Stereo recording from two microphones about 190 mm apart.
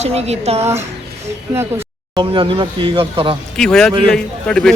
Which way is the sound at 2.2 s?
25° right (ahead or behind).